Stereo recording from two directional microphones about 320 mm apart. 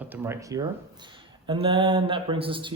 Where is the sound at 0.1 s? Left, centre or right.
Centre.